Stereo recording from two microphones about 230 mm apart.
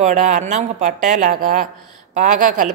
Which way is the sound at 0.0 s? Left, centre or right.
Right.